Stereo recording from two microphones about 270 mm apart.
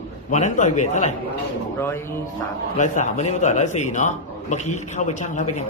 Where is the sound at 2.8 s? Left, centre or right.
Left.